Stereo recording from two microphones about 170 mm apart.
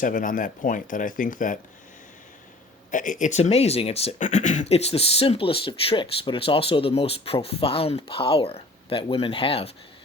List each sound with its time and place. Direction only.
0.0 s speech: 50° left (ahead or behind)
2.9 s speech: 50° left (ahead or behind)